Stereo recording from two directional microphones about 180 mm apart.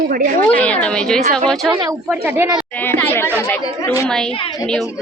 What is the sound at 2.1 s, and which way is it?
Speech, 10° right (ahead or behind).